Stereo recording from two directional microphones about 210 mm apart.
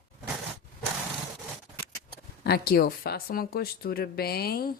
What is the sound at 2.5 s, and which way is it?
Speech, 45° left (ahead or behind).